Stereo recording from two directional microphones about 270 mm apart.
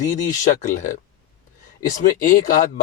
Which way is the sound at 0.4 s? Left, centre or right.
Left.